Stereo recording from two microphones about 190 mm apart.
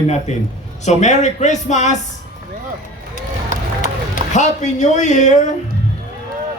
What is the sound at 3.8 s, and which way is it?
A man's voice, 40° left (ahead or behind).